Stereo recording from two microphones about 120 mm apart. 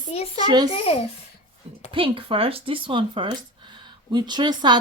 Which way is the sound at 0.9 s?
55° left (ahead or behind).